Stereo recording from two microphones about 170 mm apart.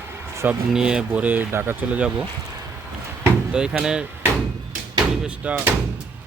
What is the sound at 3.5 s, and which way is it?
Speech, 5° right (ahead or behind).